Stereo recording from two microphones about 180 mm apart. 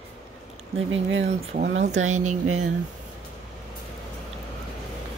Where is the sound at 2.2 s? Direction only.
40° right (ahead or behind).